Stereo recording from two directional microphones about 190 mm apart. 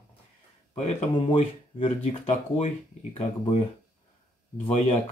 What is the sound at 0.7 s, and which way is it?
Speech, 35° left (ahead or behind).